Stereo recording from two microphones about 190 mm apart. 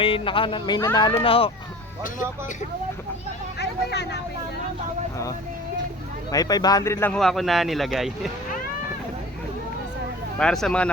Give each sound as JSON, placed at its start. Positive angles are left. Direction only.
{"t": 0.0, "sound": "speech", "side_deg": 25}
{"t": 3.6, "sound": "speech", "side_deg": 60}
{"t": 6.3, "sound": "speech", "side_deg": 20}
{"t": 10.3, "sound": "speech", "side_deg": 5}